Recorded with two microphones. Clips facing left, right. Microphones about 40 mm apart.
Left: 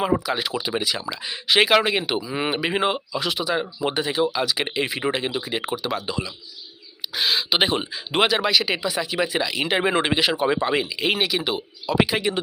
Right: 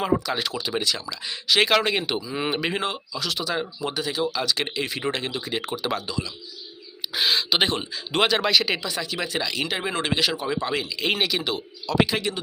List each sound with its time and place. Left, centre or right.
0.0 s speech: centre
2.8 s speech: left
3.3 s speech: centre
3.8 s speech: left; by 6.1 s centre
6.1 s speech: left
7.1 s speech: centre
7.5 s speech: centre
9.6 s speech: left
10.3 s speech: left
10.6 s speech: centre
11.1 s speech: centre